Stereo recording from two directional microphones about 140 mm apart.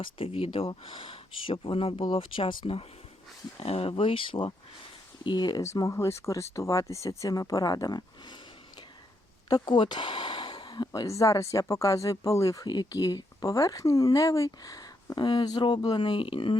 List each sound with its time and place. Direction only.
0.0 s speech: 40° left (ahead or behind)
9.5 s speech: 30° left (ahead or behind)